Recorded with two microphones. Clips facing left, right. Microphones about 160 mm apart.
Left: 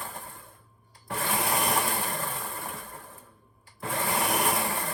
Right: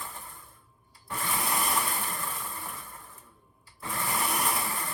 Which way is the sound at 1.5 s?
40° left (ahead or behind).